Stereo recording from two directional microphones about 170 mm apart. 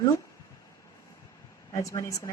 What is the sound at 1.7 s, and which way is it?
Speech, 20° left (ahead or behind).